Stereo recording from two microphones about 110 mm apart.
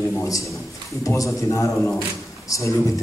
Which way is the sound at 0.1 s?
25° left (ahead or behind).